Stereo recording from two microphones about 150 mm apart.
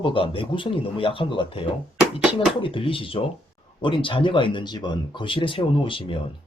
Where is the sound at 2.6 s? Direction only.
35° left (ahead or behind).